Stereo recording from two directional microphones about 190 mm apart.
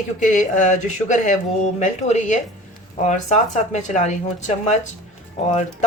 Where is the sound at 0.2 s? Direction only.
40° left (ahead or behind).